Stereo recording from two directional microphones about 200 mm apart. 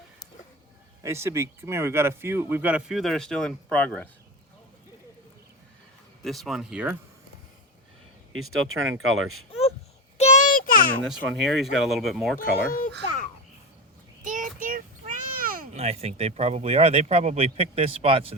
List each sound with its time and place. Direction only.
1.0 s a man's voice: 15° right (ahead or behind); by 4.1 s 5° left (ahead or behind)
6.2 s speech: centre (ahead or behind)
8.3 s speech: 90° right
10.2 s child singing: 35° left (ahead or behind)
11.0 s speech: 5° right (ahead or behind)
12.4 s speech: 45° left (ahead or behind)
14.2 s a sound: 40° right (ahead or behind)
15.7 s speech: 30° right (ahead or behind)